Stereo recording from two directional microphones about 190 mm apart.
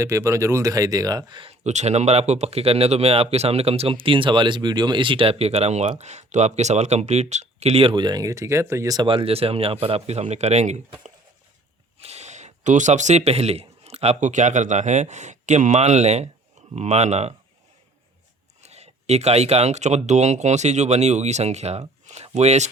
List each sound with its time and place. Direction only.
0.0 s speech: 15° right (ahead or behind); by 10.8 s 35° right (ahead or behind)
11.9 s speech: 35° right (ahead or behind)
18.6 s speech: 35° right (ahead or behind)